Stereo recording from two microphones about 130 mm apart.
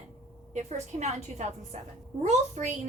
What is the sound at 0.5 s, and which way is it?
A woman's voice, 60° right (ahead or behind).